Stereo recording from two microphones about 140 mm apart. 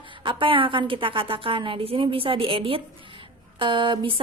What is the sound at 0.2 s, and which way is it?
A woman's voice, 35° right (ahead or behind).